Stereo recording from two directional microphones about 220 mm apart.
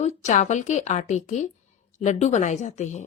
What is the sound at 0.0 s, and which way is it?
Speech, 30° left (ahead or behind).